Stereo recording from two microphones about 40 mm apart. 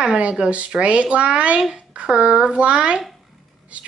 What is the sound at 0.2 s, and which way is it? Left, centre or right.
A child's voice, right.